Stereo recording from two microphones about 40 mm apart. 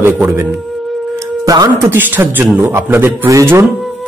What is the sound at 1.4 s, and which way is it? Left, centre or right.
Speech, right.